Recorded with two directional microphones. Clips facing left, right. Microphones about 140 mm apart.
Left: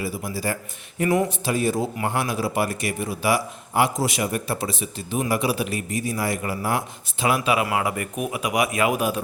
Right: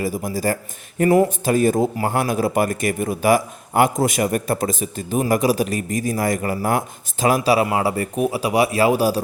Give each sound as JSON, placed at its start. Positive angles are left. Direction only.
{"t": 0.0, "sound": "a man's voice", "side_deg": -40}